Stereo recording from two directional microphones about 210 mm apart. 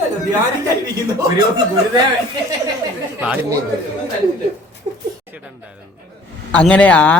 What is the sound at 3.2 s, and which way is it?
Speech, 10° right (ahead or behind).